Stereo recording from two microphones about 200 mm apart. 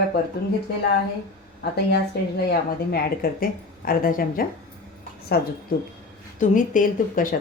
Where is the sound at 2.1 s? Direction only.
55° left (ahead or behind).